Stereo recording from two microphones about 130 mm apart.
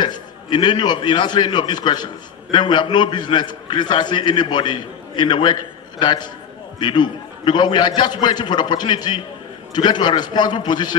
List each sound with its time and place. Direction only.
0.0 s a man's voice: 35° left (ahead or behind)